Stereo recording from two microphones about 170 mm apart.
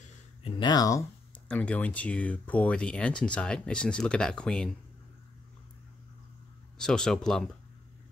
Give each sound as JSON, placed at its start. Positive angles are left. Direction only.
{"t": 0.4, "sound": "speech", "side_deg": 30}
{"t": 1.5, "sound": "speech", "side_deg": 10}
{"t": 6.8, "sound": "speech", "side_deg": 5}